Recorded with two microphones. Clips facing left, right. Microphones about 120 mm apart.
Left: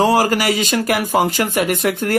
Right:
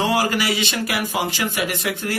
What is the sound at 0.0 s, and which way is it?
Speech, 40° left (ahead or behind).